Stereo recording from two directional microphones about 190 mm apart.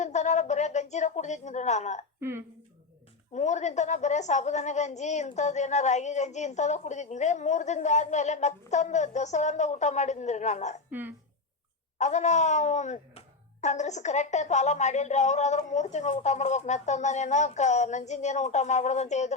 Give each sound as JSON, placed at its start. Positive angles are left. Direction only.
{"t": 0.0, "sound": "a woman's voice", "side_deg": 40}
{"t": 3.3, "sound": "a woman's voice", "side_deg": 40}
{"t": 11.9, "sound": "a woman's voice", "side_deg": 40}